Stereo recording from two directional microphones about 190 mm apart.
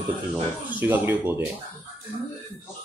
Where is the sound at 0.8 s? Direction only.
10° right (ahead or behind).